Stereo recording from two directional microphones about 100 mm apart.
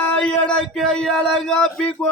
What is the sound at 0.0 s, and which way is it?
Speech, 10° left (ahead or behind).